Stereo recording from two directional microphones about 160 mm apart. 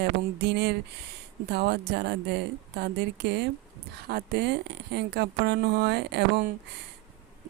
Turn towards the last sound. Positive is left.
turn(degrees=-90)